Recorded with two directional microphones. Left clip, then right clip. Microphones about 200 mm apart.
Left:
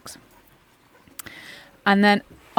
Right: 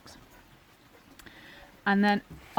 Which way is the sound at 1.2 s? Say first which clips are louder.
Left 8 dB; 45° left (ahead or behind).